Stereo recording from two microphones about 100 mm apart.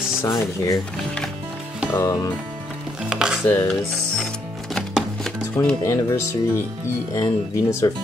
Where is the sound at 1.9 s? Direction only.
30° left (ahead or behind).